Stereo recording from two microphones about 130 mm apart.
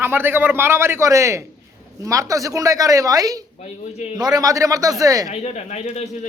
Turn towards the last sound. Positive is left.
turn(degrees=60)  # may be behind; listen again after turning